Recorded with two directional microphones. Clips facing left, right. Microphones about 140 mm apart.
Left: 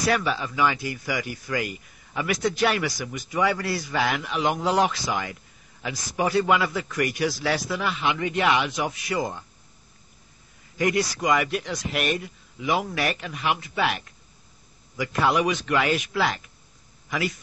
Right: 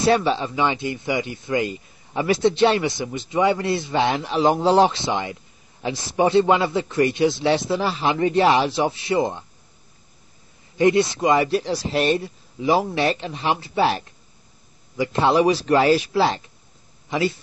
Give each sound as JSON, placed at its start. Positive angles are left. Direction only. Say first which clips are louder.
{"t": 0.0, "sound": "speech", "louder": "right 6 dB", "side_deg": -30}
{"t": 10.8, "sound": "speech", "louder": "right 7 dB", "side_deg": -25}